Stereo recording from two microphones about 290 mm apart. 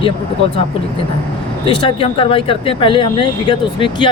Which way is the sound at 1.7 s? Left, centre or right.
Centre.